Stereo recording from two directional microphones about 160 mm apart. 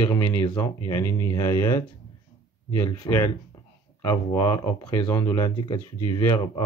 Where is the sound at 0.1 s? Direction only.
15° left (ahead or behind).